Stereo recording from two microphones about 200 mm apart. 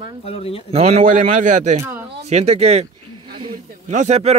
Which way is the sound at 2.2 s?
35° right (ahead or behind).